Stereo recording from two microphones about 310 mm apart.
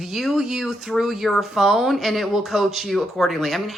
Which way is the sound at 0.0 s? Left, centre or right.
Centre.